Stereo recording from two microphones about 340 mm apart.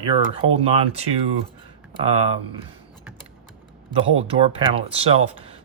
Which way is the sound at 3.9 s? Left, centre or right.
Centre.